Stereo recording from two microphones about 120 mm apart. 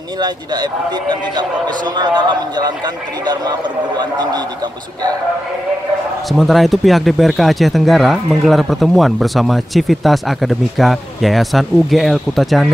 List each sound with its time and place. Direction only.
0.2 s a man's voice: 35° right (ahead or behind)
6.3 s speech: centre (ahead or behind)